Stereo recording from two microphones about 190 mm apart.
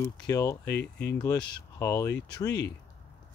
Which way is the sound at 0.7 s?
65° left (ahead or behind).